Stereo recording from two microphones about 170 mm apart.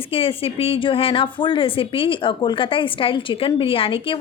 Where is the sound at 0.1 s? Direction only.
35° left (ahead or behind).